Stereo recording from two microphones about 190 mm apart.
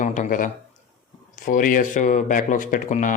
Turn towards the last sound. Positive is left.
turn(degrees=40)  # may be behind; listen again after turning